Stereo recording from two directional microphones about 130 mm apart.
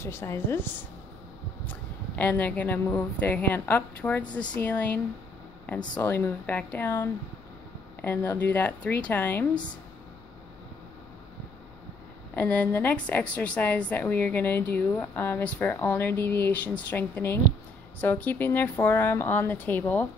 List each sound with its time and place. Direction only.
0.0 s a woman's voice: 20° left (ahead or behind)
12.4 s a woman's voice: 15° left (ahead or behind)